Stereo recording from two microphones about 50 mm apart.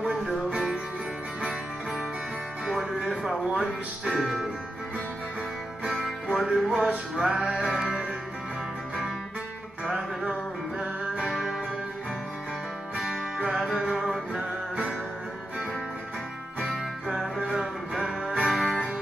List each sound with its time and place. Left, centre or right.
2.6 s music: centre
6.3 s music: centre
9.8 s music: centre
12.9 s music: centre
13.8 s music: centre
14.3 s music: centre
16.7 s music: centre